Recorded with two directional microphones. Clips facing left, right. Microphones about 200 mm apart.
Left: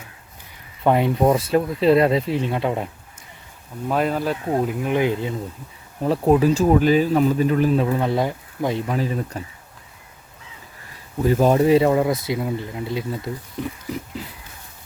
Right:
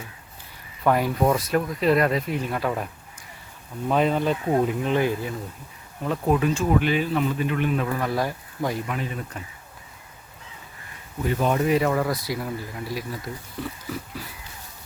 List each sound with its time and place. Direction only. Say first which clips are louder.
0.9 s speech: left 4 dB; 25° left (ahead or behind)
3.8 s speech: even; 5° left (ahead or behind)
4.9 s speech: left 2 dB; 15° left (ahead or behind)
6.0 s speech: left 6 dB; 35° left (ahead or behind)
8.9 s speech: left 6 dB; 35° left (ahead or behind)
11.2 s speech: left 6 dB; 35° left (ahead or behind); by 14.3 s 20° left (ahead or behind)